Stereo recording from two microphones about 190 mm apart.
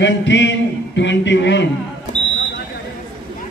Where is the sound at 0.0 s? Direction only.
70° left (ahead or behind).